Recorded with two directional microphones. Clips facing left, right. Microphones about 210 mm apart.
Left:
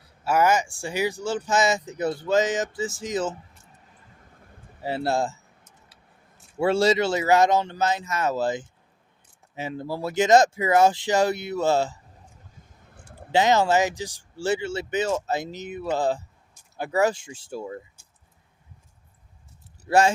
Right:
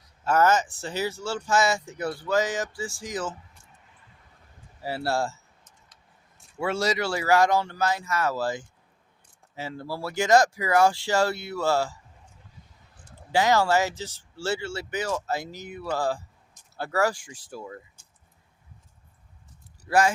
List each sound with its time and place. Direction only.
0.3 s speech: 10° left (ahead or behind)
4.8 s speech: 20° left (ahead or behind)
6.6 s speech: 30° left (ahead or behind)
13.3 s speech: 20° left (ahead or behind)
19.9 s speech: 25° left (ahead or behind)